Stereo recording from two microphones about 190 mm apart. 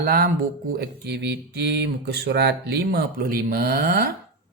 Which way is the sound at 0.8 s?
60° right (ahead or behind).